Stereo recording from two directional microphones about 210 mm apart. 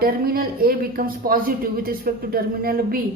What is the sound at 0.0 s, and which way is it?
Speech, 45° right (ahead or behind).